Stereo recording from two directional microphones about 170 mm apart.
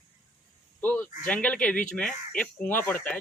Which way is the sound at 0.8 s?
10° left (ahead or behind).